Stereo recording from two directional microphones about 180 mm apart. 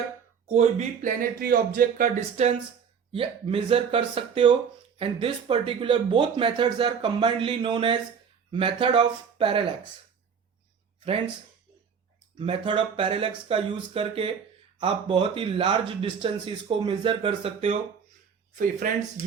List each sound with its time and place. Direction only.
0.4 s speech: 40° right (ahead or behind)
12.4 s speech: 30° right (ahead or behind)
18.5 s speech: 50° right (ahead or behind)